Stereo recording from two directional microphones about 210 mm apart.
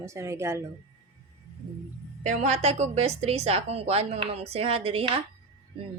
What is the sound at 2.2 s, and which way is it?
Speech, 35° right (ahead or behind).